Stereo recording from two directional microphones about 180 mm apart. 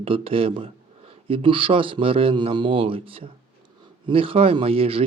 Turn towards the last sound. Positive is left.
turn(degrees=-30)  # may be behind; listen again after turning